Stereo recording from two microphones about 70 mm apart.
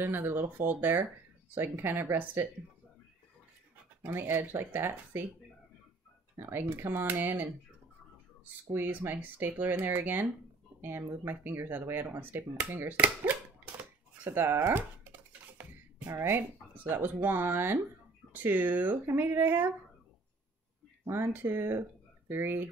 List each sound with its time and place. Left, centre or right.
0.0 s speech: right
4.0 s speech: right
6.3 s speech: right
8.7 s speech: right
14.2 s speech: right
21.0 s speech: right